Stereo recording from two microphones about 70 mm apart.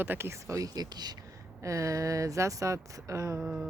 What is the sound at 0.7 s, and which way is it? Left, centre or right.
Speech, right.